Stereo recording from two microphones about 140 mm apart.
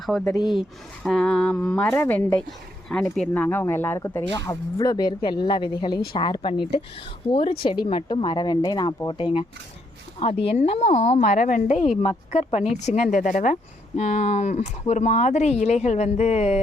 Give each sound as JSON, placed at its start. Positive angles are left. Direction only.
{"t": 1.0, "sound": "a woman's voice", "side_deg": 5}
{"t": 11.2, "sound": "a woman's voice", "side_deg": 70}
{"t": 12.0, "sound": "speech", "side_deg": 50}